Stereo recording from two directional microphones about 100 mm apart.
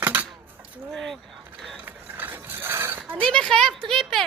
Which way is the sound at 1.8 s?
20° right (ahead or behind).